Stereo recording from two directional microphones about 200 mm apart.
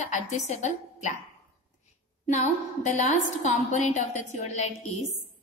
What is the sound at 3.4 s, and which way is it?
A woman's voice, 35° left (ahead or behind).